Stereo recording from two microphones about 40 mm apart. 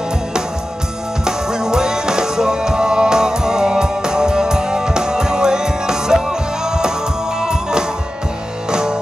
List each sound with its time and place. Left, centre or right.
1.2 s music: centre